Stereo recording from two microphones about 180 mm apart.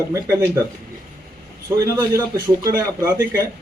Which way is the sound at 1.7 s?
15° right (ahead or behind).